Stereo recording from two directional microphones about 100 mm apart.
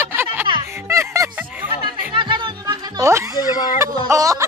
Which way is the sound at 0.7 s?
25° right (ahead or behind).